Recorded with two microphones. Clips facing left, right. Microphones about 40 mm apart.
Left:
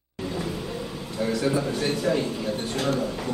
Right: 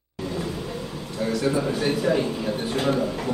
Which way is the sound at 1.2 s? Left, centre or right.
Centre.